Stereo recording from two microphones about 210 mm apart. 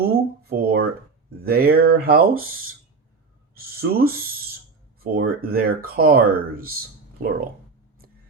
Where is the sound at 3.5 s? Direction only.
45° right (ahead or behind).